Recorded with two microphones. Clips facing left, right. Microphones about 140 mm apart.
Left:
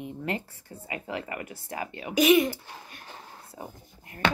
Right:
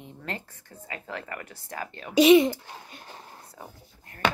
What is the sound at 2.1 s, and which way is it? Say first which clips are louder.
Speech: right 4 dB; 25° right (ahead or behind).